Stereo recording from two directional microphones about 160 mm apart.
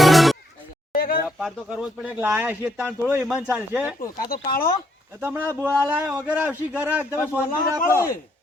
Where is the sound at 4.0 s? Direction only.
60° left (ahead or behind).